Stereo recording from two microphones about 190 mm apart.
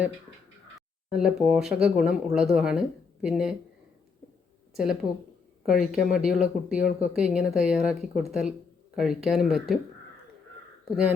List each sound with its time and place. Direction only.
1.1 s speech: 5° right (ahead or behind)
4.7 s speech: 5° right (ahead or behind)